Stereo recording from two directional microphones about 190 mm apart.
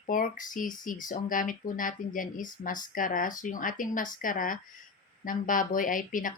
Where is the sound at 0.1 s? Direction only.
45° left (ahead or behind).